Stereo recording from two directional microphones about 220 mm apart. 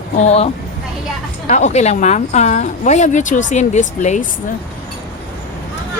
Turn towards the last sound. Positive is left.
turn(degrees=35)  # may be behind; listen again after turning